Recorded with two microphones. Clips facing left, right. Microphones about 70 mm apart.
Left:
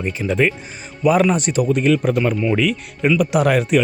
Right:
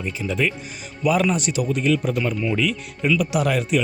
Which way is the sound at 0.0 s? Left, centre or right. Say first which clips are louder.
Left 5 dB; left.